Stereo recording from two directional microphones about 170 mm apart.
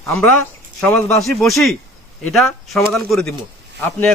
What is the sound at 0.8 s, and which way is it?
Speech, 5° left (ahead or behind).